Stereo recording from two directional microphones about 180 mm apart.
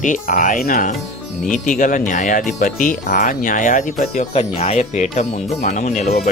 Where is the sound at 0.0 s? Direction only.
45° left (ahead or behind).